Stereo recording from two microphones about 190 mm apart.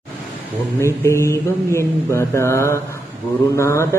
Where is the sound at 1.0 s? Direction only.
15° left (ahead or behind).